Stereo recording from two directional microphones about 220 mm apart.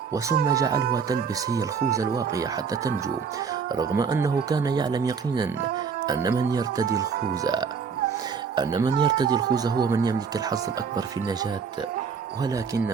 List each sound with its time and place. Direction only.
0.4 s speech: 15° right (ahead or behind)